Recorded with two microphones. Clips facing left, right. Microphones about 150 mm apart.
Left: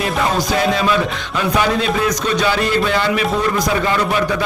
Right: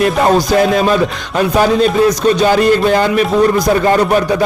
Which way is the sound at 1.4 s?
40° right (ahead or behind).